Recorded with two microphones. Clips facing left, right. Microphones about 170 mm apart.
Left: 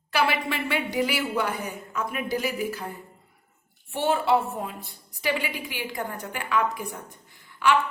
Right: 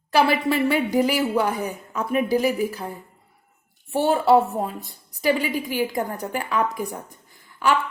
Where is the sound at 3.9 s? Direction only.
35° right (ahead or behind).